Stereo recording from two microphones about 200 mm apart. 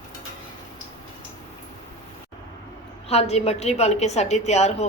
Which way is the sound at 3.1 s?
30° left (ahead or behind).